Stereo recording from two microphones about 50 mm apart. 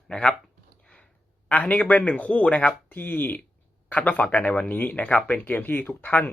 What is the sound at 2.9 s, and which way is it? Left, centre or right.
Speech, left.